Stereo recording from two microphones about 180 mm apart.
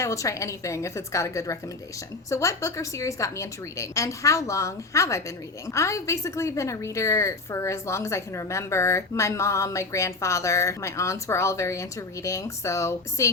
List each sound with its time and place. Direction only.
0.0 s a woman's voice: 15° left (ahead or behind)